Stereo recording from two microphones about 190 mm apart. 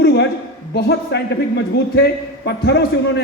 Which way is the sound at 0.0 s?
60° left (ahead or behind).